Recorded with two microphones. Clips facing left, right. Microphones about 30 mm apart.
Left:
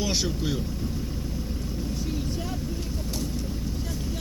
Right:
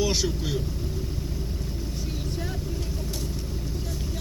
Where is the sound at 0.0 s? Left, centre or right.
Left.